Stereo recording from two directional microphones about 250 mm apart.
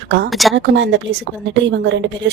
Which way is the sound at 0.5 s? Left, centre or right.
Right.